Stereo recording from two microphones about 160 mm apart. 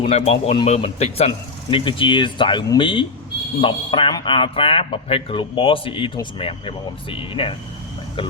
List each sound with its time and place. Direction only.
0.0 s a man's voice: 40° left (ahead or behind)